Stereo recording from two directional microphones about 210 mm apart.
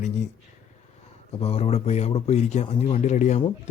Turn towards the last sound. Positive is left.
turn(degrees=30)  # may be behind; listen again after turning